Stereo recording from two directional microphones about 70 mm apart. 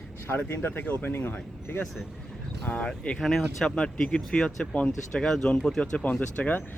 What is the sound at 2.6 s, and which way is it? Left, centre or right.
Speech, centre.